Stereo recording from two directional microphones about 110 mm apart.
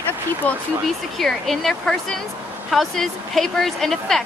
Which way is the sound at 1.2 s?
Centre (ahead or behind).